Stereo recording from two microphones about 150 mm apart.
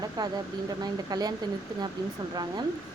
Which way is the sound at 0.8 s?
25° right (ahead or behind).